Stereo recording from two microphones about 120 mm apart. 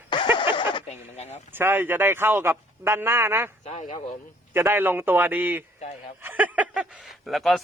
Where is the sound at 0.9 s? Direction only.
60° left (ahead or behind).